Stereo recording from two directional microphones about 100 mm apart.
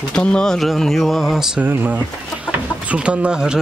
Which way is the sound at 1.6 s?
15° right (ahead or behind).